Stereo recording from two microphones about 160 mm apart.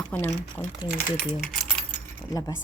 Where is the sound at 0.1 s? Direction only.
10° left (ahead or behind).